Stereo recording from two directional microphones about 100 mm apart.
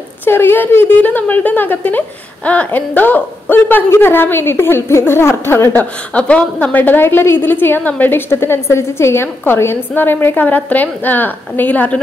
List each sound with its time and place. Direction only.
0.2 s a woman's voice: 20° left (ahead or behind)